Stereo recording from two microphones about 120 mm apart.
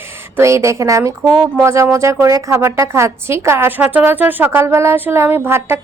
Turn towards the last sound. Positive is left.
turn(degrees=-20)  # may be behind; listen again after turning